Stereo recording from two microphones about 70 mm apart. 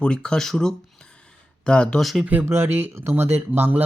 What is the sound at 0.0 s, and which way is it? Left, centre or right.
Speech, centre.